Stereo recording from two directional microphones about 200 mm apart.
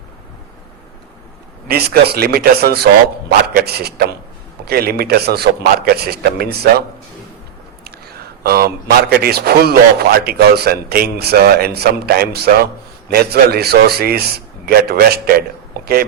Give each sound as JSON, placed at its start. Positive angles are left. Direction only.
{"t": 1.6, "sound": "speech", "side_deg": -50}
{"t": 7.9, "sound": "speech", "side_deg": -50}